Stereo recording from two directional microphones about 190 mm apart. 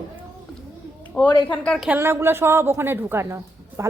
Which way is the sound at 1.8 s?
10° right (ahead or behind).